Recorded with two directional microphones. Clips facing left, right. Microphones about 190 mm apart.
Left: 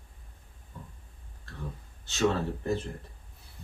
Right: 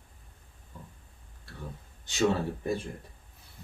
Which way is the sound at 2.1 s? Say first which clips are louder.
Right 5 dB; 15° right (ahead or behind).